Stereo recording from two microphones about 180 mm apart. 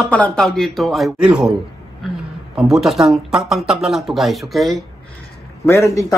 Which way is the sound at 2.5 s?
5° right (ahead or behind).